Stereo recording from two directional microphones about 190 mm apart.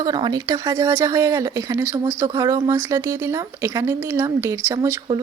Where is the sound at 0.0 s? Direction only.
20° right (ahead or behind).